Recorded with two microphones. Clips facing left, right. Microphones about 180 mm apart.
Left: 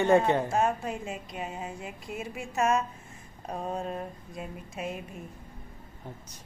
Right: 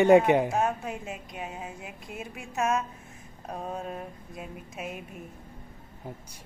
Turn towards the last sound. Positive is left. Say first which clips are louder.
# left 2 dB
turn(degrees=-5)  # may be behind; listen again after turning